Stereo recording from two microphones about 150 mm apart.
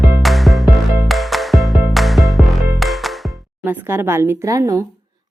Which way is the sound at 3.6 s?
15° right (ahead or behind).